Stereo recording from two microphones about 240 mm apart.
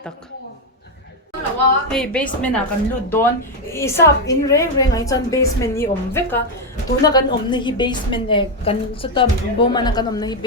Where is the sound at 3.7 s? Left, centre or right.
Centre.